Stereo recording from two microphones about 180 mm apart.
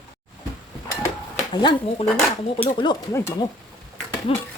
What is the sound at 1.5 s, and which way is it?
Speech, 25° left (ahead or behind).